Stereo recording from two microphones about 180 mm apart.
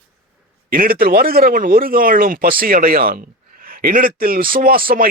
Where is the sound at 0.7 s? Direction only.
55° right (ahead or behind).